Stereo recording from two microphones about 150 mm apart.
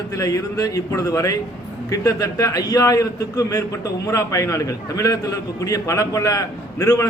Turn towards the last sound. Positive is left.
turn(degrees=20)  # may be behind; listen again after turning